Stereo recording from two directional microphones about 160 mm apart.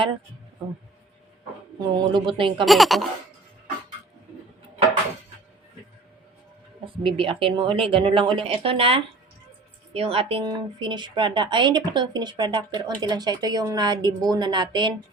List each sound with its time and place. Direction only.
1.8 s a woman's voice: 30° right (ahead or behind)
2.6 s speech: centre (ahead or behind)
6.8 s a woman's voice: 35° right (ahead or behind)